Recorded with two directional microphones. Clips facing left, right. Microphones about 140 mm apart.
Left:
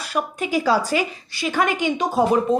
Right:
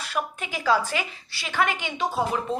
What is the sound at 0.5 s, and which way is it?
A woman's voice, 35° left (ahead or behind).